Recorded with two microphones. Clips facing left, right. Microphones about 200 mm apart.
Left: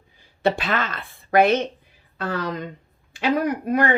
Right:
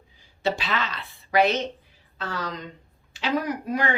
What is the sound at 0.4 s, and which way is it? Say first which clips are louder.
Speech: left 4 dB; 55° left (ahead or behind).